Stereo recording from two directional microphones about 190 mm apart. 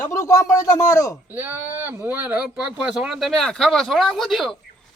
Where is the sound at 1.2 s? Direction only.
10° right (ahead or behind).